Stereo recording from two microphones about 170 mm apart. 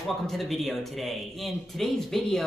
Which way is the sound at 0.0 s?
Centre (ahead or behind).